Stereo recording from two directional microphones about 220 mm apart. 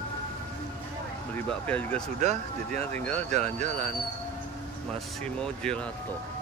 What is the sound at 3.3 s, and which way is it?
Speech, 30° right (ahead or behind).